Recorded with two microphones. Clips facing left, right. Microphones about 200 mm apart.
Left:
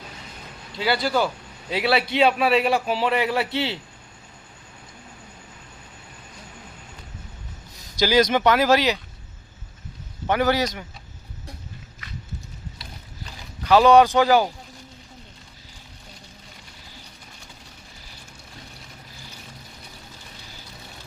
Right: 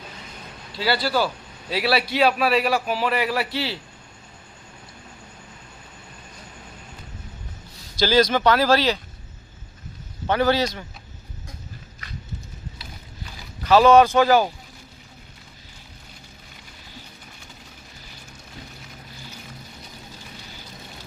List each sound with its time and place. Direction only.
0.7 s a man's voice: 20° left (ahead or behind)
7.9 s speech: 15° left (ahead or behind)
10.2 s speech: 15° left (ahead or behind)
13.7 s speech: 15° left (ahead or behind)